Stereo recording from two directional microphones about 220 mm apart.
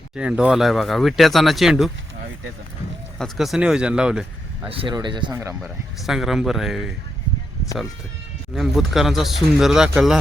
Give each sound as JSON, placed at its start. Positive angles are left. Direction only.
{"t": 0.2, "sound": "speech", "side_deg": -5}
{"t": 3.2, "sound": "speech", "side_deg": 0}
{"t": 4.7, "sound": "speech", "side_deg": -20}
{"t": 6.1, "sound": "speech", "side_deg": 0}
{"t": 8.5, "sound": "speech", "side_deg": 0}